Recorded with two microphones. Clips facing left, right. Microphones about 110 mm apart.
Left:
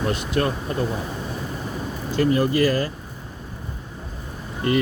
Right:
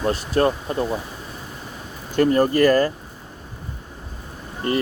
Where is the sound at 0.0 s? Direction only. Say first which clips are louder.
Right 3 dB; 35° right (ahead or behind).